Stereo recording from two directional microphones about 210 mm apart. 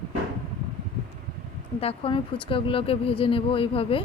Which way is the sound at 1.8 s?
25° left (ahead or behind).